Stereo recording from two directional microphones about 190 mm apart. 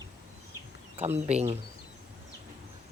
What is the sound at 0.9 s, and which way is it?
Speech, 35° right (ahead or behind).